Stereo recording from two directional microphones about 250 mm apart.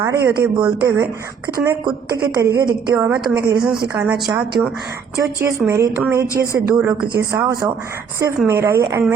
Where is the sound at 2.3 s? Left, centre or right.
Centre.